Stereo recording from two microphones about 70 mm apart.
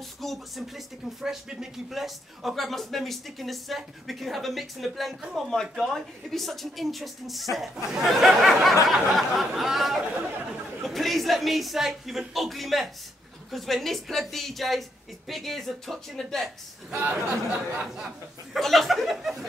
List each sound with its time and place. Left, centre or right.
0.2 s speech: centre
16.9 s speech: right
17.7 s a sound: centre
18.5 s speech: centre